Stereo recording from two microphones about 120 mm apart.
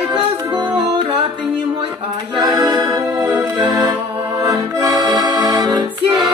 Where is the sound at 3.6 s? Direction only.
35° right (ahead or behind).